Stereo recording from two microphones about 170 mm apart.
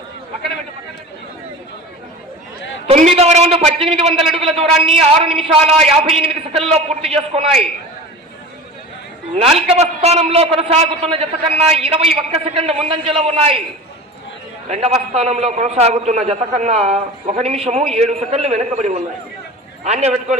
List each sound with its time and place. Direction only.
2.9 s a man's voice: 40° right (ahead or behind)
9.3 s a man's voice: 40° right (ahead or behind)
14.7 s a man's voice: 40° right (ahead or behind)